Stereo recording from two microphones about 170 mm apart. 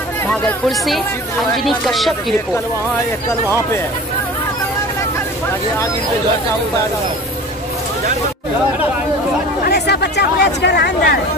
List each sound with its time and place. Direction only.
0.3 s speech: centre (ahead or behind)
9.7 s speech: 75° left (ahead or behind)